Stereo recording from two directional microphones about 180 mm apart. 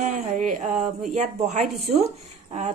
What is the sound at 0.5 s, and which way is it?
Speech, centre (ahead or behind).